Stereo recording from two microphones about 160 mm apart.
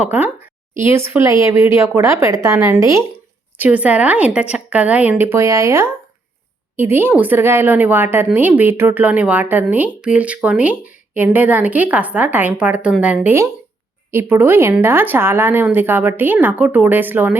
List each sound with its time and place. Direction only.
0.0 s a woman's voice: 10° right (ahead or behind)